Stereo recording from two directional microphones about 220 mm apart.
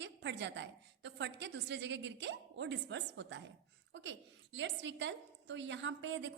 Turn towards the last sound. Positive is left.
turn(degrees=-55)  # may be behind; listen again after turning